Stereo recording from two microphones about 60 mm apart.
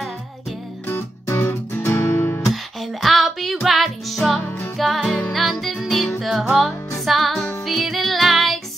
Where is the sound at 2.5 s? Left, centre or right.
Centre.